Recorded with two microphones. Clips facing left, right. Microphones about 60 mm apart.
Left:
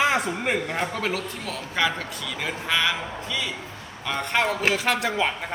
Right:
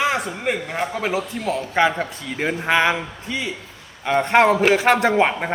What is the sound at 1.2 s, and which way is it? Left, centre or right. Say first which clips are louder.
Speech: right 8 dB; centre.